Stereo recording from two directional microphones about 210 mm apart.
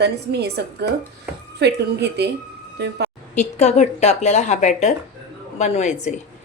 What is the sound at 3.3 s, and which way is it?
Speech, 35° left (ahead or behind).